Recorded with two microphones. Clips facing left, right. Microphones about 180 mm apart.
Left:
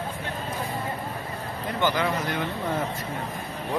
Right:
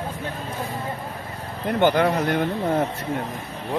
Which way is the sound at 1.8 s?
60° right (ahead or behind).